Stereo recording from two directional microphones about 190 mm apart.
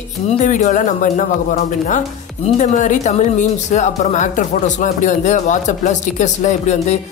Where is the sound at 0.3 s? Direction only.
40° left (ahead or behind).